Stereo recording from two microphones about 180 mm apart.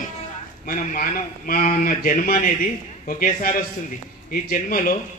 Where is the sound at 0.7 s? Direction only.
50° left (ahead or behind).